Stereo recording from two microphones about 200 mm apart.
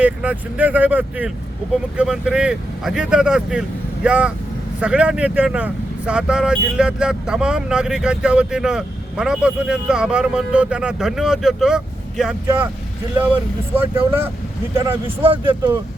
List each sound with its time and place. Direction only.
0.0 s speech: 5° right (ahead or behind)
13.7 s speech: 10° right (ahead or behind)
15.0 s speech: 25° right (ahead or behind)